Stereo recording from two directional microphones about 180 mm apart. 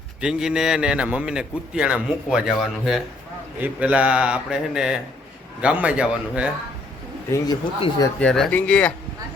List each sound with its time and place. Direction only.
0.2 s a man's voice: 5° right (ahead or behind)
7.8 s speech: 20° left (ahead or behind)
8.2 s speech: 5° left (ahead or behind)